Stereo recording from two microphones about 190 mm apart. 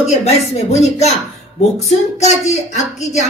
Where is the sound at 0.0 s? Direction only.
35° left (ahead or behind).